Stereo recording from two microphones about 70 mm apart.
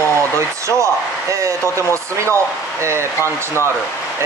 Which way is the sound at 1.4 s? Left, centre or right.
Right.